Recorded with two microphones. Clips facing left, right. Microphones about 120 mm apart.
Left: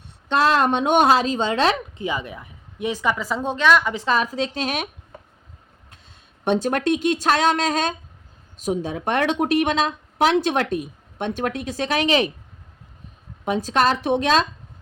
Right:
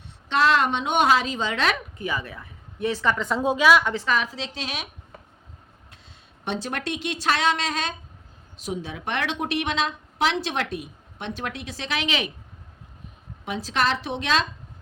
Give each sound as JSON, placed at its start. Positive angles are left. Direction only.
{"t": 0.3, "sound": "a woman's voice", "side_deg": 40}
{"t": 3.4, "sound": "speech", "side_deg": -5}
{"t": 4.0, "sound": "speech", "side_deg": 35}
{"t": 6.4, "sound": "speech", "side_deg": 50}
{"t": 13.4, "sound": "speech", "side_deg": 45}